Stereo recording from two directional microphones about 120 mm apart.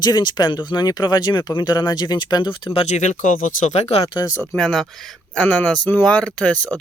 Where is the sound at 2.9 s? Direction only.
85° left; by 4.0 s 65° left (ahead or behind).